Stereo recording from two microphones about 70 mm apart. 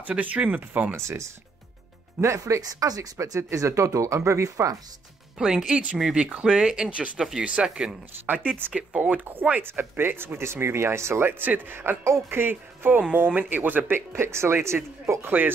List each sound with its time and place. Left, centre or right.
0.0 s speech: right
0.9 s speech: right
2.2 s speech: right
3.3 s speech: right
5.4 s speech: centre
9.2 s speech: right